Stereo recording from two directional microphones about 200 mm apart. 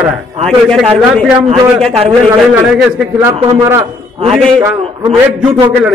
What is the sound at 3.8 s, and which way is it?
Speech, 30° right (ahead or behind).